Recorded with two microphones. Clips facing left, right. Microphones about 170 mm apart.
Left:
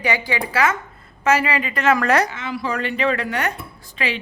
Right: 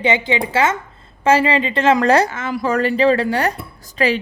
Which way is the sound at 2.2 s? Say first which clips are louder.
Right 5 dB; 45° right (ahead or behind).